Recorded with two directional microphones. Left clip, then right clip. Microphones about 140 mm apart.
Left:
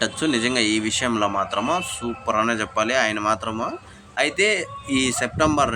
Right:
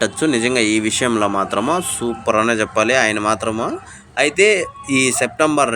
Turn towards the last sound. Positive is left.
turn(degrees=-35)  # may be behind; listen again after turning